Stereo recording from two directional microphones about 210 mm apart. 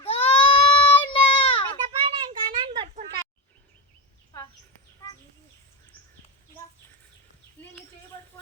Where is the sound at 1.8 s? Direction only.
20° right (ahead or behind).